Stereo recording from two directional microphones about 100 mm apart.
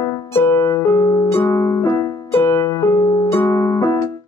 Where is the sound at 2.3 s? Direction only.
25° left (ahead or behind).